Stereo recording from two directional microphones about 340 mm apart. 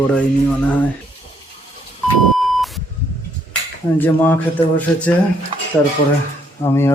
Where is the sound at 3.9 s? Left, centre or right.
Centre.